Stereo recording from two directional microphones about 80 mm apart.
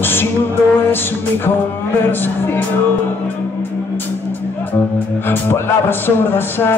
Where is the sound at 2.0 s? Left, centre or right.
Left.